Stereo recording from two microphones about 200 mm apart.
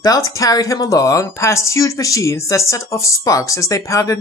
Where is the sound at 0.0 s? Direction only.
15° left (ahead or behind).